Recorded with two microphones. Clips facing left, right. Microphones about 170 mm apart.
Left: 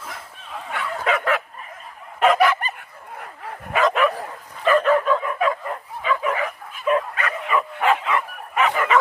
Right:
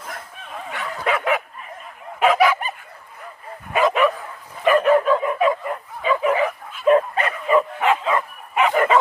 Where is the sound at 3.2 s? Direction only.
70° left (ahead or behind).